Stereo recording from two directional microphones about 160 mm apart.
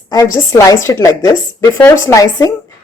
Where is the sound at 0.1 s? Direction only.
20° left (ahead or behind).